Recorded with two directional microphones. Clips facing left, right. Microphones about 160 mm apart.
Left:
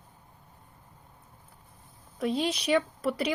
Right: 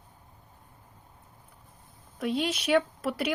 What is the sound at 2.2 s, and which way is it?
Speech, centre (ahead or behind).